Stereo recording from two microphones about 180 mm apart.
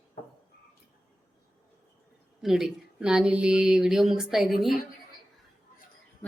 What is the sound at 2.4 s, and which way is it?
A man's voice, centre (ahead or behind).